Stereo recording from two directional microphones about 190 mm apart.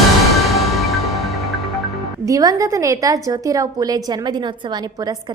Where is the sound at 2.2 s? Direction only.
20° right (ahead or behind).